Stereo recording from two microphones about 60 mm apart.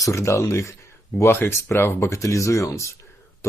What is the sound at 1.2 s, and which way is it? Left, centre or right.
Speech, left.